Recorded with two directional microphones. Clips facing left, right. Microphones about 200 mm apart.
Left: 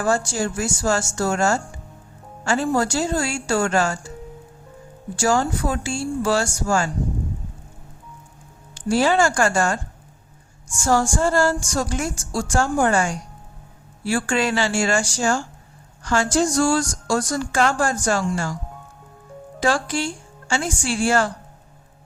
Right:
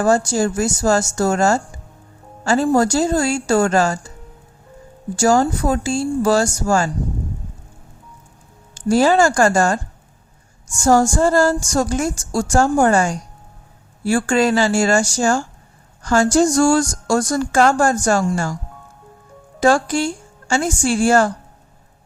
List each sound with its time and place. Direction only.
0.0 s a woman's voice: 40° right (ahead or behind)
5.1 s a woman's voice: 40° right (ahead or behind)
8.7 s a woman's voice: 40° right (ahead or behind)
19.5 s a woman's voice: 45° right (ahead or behind)